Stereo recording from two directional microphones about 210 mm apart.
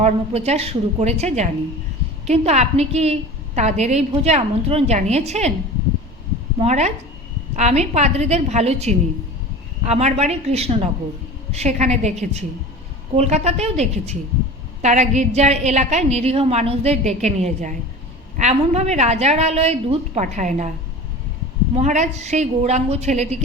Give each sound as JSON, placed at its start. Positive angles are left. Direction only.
{"t": 0.0, "sound": "a woman's voice", "side_deg": -30}
{"t": 6.6, "sound": "a woman's voice", "side_deg": -30}
{"t": 21.8, "sound": "a woman's voice", "side_deg": -35}